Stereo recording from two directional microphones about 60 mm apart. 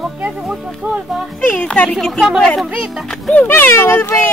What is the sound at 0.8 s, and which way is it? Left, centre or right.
Speech, right.